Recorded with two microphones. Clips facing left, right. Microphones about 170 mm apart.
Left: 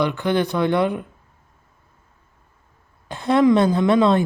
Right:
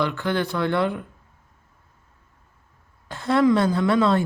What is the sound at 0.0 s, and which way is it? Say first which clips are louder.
Speech: left 4 dB; 15° left (ahead or behind).